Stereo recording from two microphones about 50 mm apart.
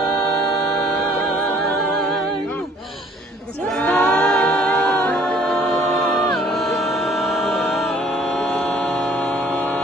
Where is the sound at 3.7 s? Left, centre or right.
Centre.